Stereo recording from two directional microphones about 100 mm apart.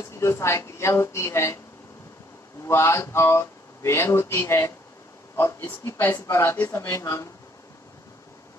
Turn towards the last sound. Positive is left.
turn(degrees=30)  # may be behind; listen again after turning